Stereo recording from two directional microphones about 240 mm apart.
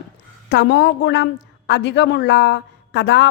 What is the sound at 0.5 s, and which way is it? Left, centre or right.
A woman's voice, left.